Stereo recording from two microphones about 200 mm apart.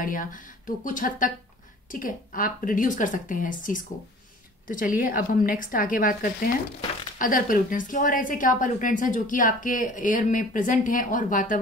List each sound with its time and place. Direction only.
0.0 s a woman's voice: 40° left (ahead or behind)